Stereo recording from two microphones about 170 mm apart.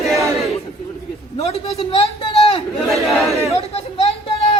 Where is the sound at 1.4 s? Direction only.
35° left (ahead or behind).